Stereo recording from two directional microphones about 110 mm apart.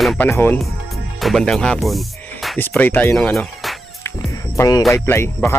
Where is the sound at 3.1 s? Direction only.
10° left (ahead or behind).